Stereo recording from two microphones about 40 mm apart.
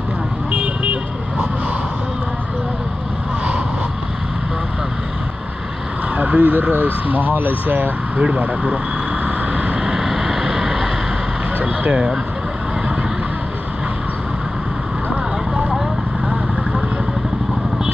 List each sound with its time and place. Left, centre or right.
0.5 s vehicle: right
6.1 s speech: right
8.2 s speech: right
9.6 s vehicle: right
9.9 s vehicle: centre
11.9 s speech: right